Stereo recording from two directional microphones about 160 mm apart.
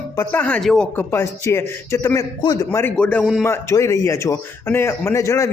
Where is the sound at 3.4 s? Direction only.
15° left (ahead or behind).